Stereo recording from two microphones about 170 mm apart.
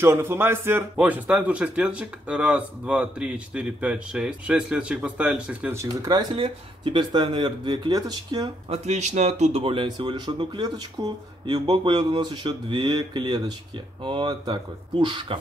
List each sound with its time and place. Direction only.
0.0 s speech: 15° right (ahead or behind)
8.6 s speech: 40° right (ahead or behind)